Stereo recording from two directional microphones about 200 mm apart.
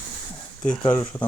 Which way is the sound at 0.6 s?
5° left (ahead or behind).